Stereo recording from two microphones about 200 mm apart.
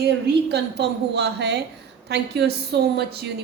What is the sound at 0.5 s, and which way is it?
A woman's voice, 55° right (ahead or behind).